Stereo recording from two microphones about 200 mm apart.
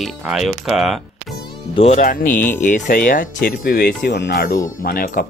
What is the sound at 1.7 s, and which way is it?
Speech, 30° left (ahead or behind).